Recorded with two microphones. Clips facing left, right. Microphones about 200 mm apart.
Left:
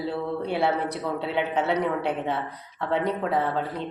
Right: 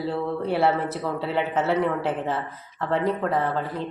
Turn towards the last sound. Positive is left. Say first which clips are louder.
# right 1 dB
turn(degrees=0)  # may be behind; listen again after turning